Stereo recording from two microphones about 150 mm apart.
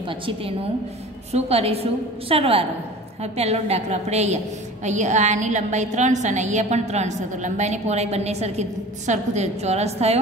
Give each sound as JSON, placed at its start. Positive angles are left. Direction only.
{"t": 0.1, "sound": "a woman's voice", "side_deg": -35}